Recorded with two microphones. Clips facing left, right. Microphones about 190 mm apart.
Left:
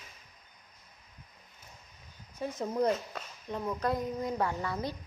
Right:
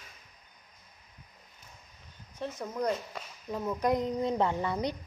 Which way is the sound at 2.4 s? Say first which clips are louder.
Left 1 dB; 10° left (ahead or behind).